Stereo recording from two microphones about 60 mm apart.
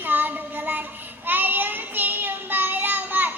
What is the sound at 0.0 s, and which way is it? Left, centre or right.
Child singing, right.